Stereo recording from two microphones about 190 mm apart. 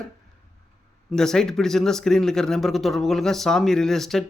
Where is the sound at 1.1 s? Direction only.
5° left (ahead or behind).